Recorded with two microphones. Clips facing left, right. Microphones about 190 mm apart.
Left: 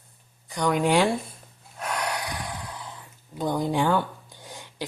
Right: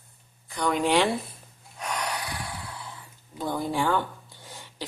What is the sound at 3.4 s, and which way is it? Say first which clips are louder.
Speech: left 3 dB; 15° left (ahead or behind).